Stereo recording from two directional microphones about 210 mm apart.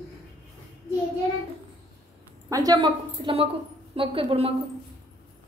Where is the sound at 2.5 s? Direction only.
20° right (ahead or behind).